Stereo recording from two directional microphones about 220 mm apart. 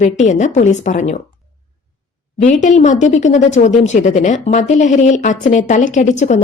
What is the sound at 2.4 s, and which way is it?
Speech, 35° left (ahead or behind).